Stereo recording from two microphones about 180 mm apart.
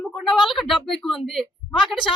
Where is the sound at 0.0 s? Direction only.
Centre (ahead or behind).